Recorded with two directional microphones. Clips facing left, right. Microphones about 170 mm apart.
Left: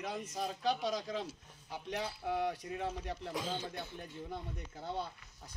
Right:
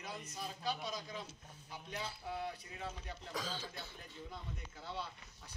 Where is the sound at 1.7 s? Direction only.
70° left (ahead or behind).